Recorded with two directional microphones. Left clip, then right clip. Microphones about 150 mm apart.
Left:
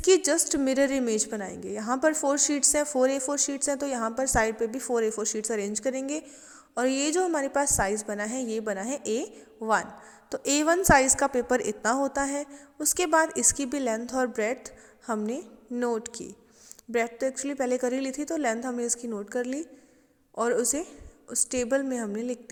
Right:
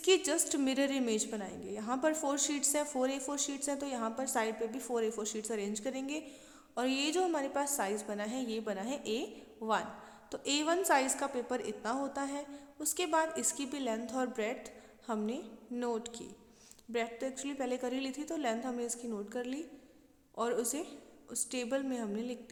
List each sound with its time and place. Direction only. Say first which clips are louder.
0.0 s a woman's voice: left 8 dB; 35° left (ahead or behind)